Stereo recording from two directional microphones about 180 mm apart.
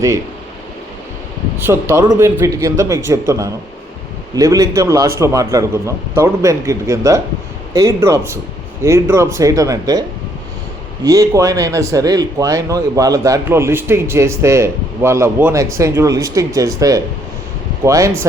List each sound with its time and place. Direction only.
1.5 s speech: 15° right (ahead or behind)
11.0 s speech: 20° right (ahead or behind)